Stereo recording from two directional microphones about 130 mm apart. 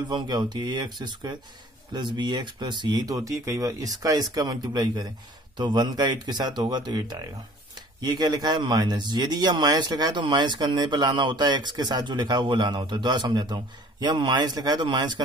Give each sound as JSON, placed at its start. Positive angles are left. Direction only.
{"t": 0.1, "sound": "a man's voice", "side_deg": -35}